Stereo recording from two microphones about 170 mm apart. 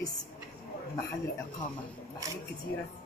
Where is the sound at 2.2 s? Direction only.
20° right (ahead or behind).